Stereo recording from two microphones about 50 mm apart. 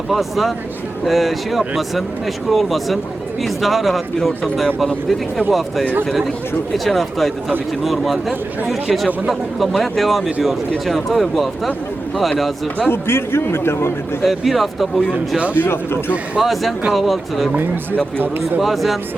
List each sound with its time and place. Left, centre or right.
0.1 s speech: centre
12.9 s a man's voice: left
14.3 s speech: centre
15.5 s speech: left
16.4 s speech: centre
18.2 s speech: right
18.6 s speech: centre